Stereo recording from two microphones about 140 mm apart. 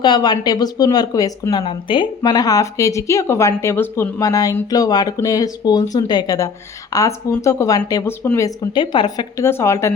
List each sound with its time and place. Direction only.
0.0 s speech: 30° left (ahead or behind)
9.4 s speech: 20° left (ahead or behind)